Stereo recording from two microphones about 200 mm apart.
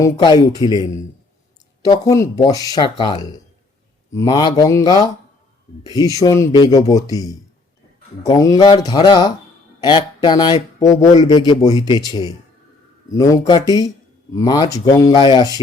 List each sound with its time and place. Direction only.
0.0 s speech: 20° left (ahead or behind)
1.9 s speech: 15° left (ahead or behind)